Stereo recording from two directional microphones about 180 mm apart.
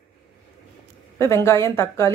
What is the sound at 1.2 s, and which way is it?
Speech, 15° left (ahead or behind).